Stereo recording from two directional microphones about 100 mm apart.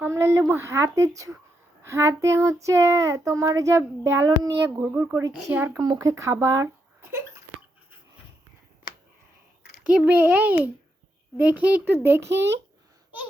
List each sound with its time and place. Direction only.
0.0 s child singing: 25° right (ahead or behind)
4.3 s a child's voice: 35° right (ahead or behind)
4.8 s child singing: 20° right (ahead or behind)
5.8 s speech: 40° right (ahead or behind)
8.9 s a sound: 50° left (ahead or behind)
9.8 s a child's voice: 15° right (ahead or behind)
12.0 s child singing: 25° right (ahead or behind)